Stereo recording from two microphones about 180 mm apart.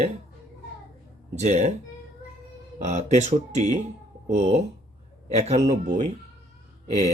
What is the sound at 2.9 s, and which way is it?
Speech, 40° right (ahead or behind).